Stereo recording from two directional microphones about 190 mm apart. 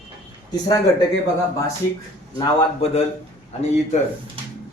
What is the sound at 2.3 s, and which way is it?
Speech, 30° left (ahead or behind).